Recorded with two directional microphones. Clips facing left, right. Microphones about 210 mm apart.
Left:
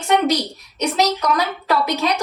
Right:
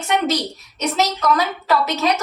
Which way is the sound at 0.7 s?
15° left (ahead or behind).